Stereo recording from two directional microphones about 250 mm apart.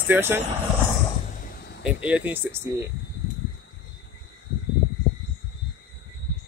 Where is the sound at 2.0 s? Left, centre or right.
Centre.